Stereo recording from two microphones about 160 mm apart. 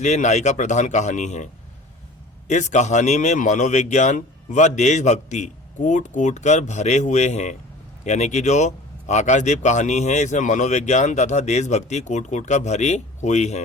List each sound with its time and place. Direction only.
0.0 s speech: 45° left (ahead or behind)
2.5 s speech: 50° left (ahead or behind)